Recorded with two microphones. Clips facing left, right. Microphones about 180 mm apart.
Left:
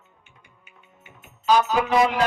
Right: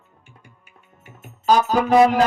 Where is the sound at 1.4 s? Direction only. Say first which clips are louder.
Right 2 dB; 45° right (ahead or behind).